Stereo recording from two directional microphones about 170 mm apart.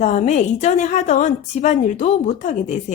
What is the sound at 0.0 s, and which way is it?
A woman's voice, 40° left (ahead or behind).